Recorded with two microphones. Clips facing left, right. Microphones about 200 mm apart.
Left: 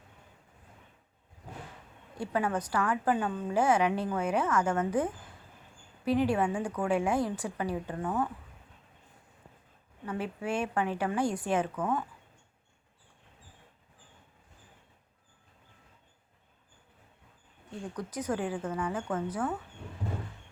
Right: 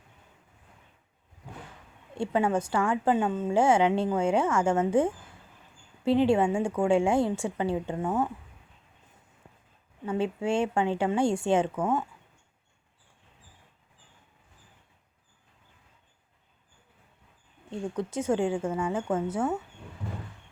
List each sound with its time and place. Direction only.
2.1 s a woman's voice: 25° right (ahead or behind)
10.1 s a woman's voice: 25° right (ahead or behind)
17.7 s a woman's voice: 25° right (ahead or behind)